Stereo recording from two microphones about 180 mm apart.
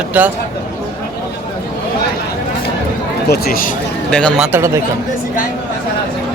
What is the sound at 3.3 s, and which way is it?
Speech, 55° left (ahead or behind).